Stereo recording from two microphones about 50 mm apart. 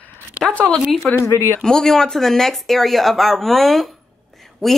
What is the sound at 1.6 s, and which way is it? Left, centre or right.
Speech, centre.